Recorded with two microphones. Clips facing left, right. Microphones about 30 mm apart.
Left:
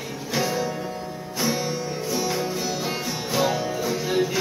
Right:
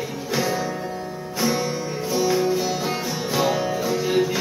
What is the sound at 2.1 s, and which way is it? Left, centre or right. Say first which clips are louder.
Music: right 7 dB; centre.